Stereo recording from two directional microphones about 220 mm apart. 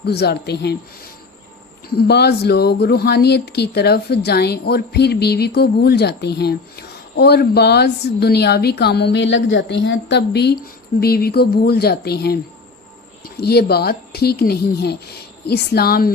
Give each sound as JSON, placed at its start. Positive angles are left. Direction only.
{"t": 0.0, "sound": "speech", "side_deg": 45}
{"t": 1.9, "sound": "speech", "side_deg": 45}